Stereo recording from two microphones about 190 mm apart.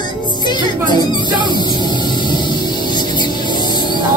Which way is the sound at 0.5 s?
25° left (ahead or behind).